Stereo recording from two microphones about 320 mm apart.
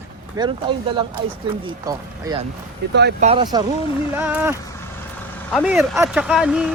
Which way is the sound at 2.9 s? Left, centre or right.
Right.